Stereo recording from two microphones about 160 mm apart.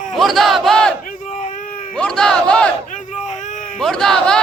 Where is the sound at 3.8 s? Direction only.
5° left (ahead or behind).